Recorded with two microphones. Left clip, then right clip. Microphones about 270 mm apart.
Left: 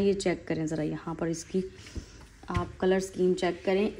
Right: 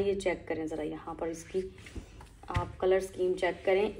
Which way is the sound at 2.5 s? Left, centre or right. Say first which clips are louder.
Left 1 dB; left.